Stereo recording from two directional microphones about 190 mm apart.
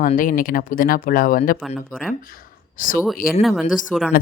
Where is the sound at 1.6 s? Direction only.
5° right (ahead or behind).